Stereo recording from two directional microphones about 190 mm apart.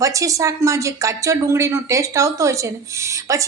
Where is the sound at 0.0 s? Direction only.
15° right (ahead or behind).